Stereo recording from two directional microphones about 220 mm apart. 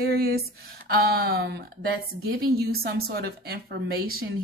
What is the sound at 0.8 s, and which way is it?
A woman's voice, 45° right (ahead or behind).